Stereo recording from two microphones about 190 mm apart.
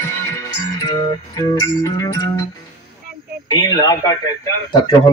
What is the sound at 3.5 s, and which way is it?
Speech, 20° left (ahead or behind).